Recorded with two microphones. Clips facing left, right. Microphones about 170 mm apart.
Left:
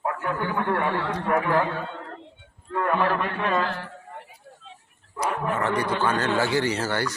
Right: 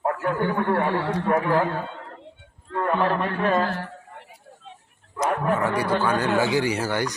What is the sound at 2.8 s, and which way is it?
A man's voice, 30° right (ahead or behind).